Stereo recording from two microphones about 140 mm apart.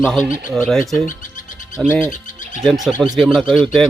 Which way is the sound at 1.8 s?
15° left (ahead or behind).